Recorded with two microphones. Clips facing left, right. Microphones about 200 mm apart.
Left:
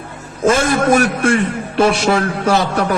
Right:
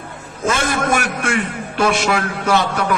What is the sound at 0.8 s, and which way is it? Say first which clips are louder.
A man's voice: left 6 dB; 35° left (ahead or behind).